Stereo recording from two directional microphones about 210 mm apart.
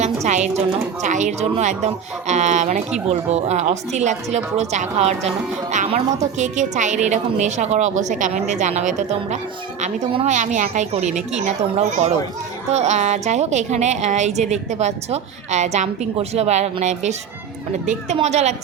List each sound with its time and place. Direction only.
0.0 s a woman's voice: 35° right (ahead or behind)